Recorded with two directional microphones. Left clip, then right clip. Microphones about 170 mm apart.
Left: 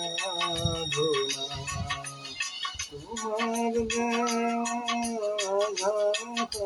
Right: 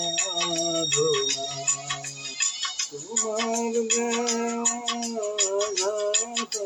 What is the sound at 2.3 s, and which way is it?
Music, 25° right (ahead or behind).